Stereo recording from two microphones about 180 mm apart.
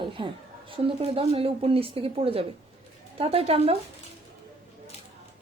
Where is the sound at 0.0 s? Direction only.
30° right (ahead or behind).